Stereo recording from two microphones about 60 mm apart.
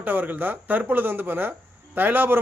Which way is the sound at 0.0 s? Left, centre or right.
Right.